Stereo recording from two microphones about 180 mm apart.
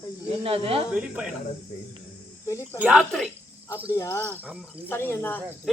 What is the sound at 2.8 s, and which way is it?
Speech, 5° right (ahead or behind).